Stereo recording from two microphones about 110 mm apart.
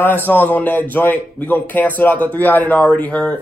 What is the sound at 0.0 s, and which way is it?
Speech, 15° left (ahead or behind).